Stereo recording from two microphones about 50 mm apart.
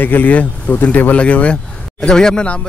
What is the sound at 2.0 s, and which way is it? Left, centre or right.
Speech, centre.